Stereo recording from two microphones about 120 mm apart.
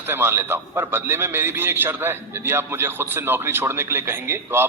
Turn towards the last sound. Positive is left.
turn(degrees=-20)  # may be behind; listen again after turning